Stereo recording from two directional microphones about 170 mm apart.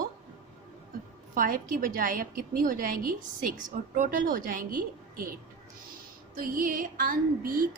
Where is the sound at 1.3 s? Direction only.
55° right (ahead or behind).